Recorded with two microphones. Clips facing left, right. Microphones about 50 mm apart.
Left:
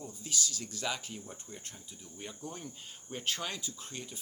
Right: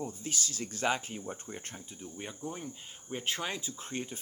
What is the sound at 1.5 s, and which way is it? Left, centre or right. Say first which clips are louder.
Speech: right 5 dB; right.